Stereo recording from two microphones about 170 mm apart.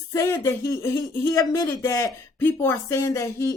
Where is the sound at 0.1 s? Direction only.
20° left (ahead or behind).